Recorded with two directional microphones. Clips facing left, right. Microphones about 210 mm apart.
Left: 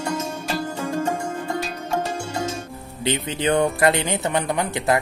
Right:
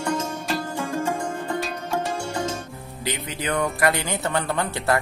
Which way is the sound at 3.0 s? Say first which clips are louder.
Left 6 dB; 25° left (ahead or behind).